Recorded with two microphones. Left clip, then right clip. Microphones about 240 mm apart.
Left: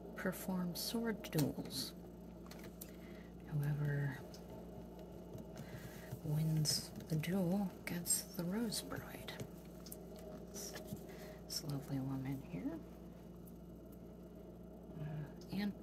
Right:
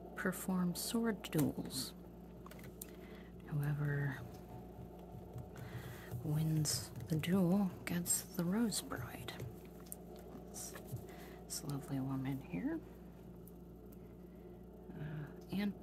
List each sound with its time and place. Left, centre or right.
0.1 s speech: centre
3.4 s speech: centre
6.3 s speech: centre
11.5 s a woman's voice: centre
15.5 s whispering: centre